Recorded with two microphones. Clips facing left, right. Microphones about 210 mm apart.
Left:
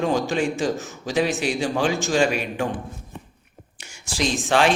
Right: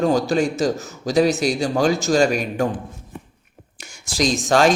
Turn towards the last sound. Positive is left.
turn(degrees=-40)  # may be behind; listen again after turning